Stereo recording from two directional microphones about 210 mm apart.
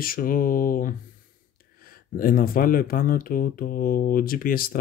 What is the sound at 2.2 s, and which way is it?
Speech, 45° left (ahead or behind).